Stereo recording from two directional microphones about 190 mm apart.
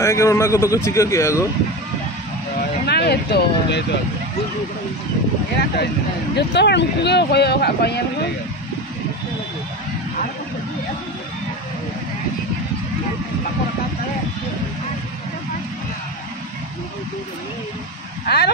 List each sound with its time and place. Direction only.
0.0 s a man's voice: 15° left (ahead or behind)
2.9 s speech: 60° left (ahead or behind)
6.3 s speech: 65° left (ahead or behind)
18.2 s speech: 60° left (ahead or behind)